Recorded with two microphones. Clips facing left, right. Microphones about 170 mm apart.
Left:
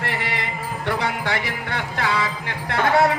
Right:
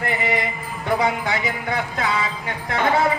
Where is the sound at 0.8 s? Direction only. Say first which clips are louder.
Right 4 dB; 70° left (ahead or behind).